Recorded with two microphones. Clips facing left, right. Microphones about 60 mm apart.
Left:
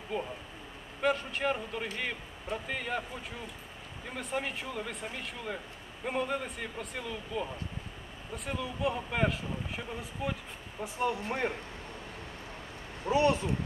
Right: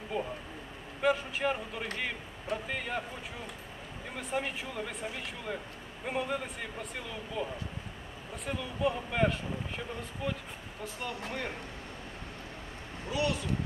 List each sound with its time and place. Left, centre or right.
0.1 s speech: centre
4.2 s speech: centre
8.5 s speech: centre
10.8 s speech: left
13.1 s speech: left